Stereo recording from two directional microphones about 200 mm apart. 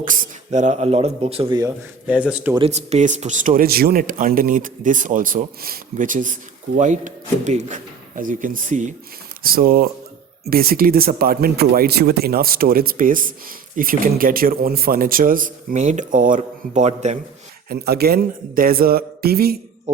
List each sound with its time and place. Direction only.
0.0 s speech: 40° right (ahead or behind); by 1.7 s 20° right (ahead or behind)
2.0 s speech: 5° right (ahead or behind)
2.6 s speech: 30° right (ahead or behind)
17.7 s speech: 50° right (ahead or behind)